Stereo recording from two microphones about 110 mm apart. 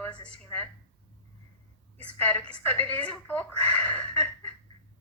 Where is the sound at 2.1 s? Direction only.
15° left (ahead or behind).